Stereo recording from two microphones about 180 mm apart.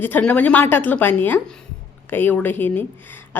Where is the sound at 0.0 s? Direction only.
10° left (ahead or behind).